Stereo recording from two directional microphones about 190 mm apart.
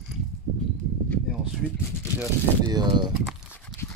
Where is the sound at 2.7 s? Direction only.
20° right (ahead or behind).